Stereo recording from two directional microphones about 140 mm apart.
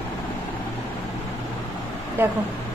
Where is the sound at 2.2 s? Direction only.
15° right (ahead or behind).